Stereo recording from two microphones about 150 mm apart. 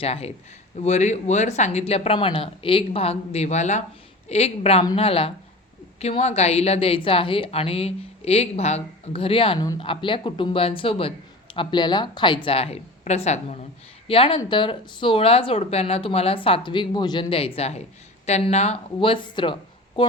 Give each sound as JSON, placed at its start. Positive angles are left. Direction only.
{"t": 0.0, "sound": "speech", "side_deg": 45}
{"t": 12.5, "sound": "speech", "side_deg": 40}
{"t": 14.1, "sound": "speech", "side_deg": 35}